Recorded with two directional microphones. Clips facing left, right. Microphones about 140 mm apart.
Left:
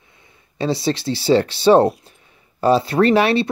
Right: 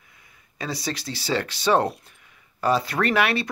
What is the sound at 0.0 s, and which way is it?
Speech, 25° left (ahead or behind).